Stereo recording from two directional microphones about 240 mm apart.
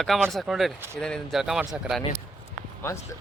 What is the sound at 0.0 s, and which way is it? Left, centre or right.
Speech, centre.